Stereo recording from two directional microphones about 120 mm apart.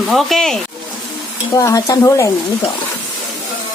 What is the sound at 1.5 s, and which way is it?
Speech, 30° left (ahead or behind).